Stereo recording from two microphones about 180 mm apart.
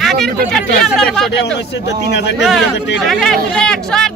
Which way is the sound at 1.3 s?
70° left (ahead or behind).